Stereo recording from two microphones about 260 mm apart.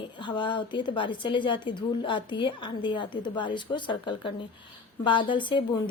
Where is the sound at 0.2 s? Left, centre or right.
Centre.